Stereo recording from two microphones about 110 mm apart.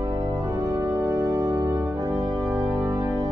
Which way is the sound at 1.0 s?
25° right (ahead or behind).